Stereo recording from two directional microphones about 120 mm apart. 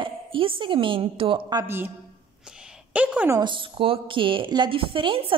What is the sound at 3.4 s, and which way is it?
A woman's voice, 45° right (ahead or behind).